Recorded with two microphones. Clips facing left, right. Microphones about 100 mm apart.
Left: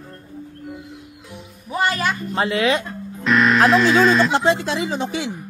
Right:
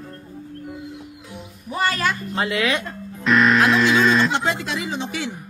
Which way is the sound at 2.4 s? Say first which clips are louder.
Left 4 dB; 30° left (ahead or behind).